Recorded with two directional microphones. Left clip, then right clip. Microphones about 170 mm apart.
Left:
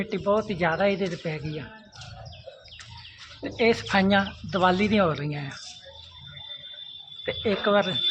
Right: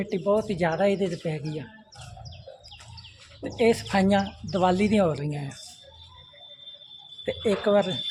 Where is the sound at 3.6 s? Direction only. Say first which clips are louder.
Even; 15° right (ahead or behind).